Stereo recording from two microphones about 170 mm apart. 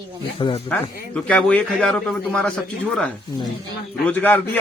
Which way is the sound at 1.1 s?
10° left (ahead or behind).